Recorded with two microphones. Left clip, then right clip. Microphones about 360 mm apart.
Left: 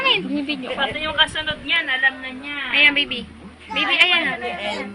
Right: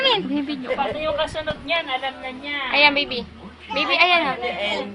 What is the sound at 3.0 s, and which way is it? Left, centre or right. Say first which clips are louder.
Speech: left 2 dB; right.